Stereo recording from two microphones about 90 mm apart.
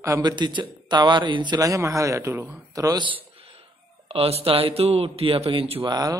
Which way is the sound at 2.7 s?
40° right (ahead or behind).